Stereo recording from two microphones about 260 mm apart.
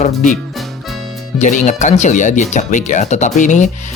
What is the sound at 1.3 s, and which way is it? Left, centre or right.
Speech, left.